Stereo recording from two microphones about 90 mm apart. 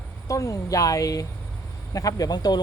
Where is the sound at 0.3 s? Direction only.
35° left (ahead or behind).